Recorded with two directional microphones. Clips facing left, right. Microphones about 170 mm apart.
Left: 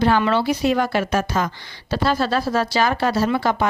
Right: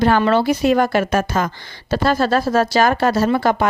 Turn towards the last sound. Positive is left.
turn(degrees=-50)  # may be behind; listen again after turning